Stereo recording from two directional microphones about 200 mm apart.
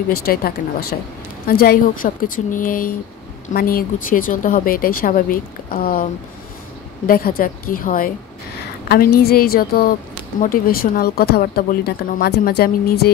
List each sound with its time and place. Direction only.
0.1 s speech: 50° left (ahead or behind)
7.1 s speech: 45° left (ahead or behind)